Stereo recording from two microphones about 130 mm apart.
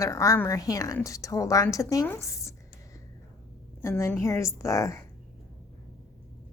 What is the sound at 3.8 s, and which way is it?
A woman's voice, 20° left (ahead or behind).